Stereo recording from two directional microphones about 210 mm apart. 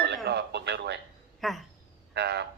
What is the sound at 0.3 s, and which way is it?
Radio, 50° right (ahead or behind).